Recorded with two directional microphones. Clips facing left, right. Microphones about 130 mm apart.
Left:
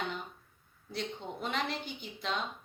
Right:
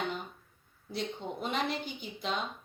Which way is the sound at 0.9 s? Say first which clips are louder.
Right 2 dB; 15° right (ahead or behind).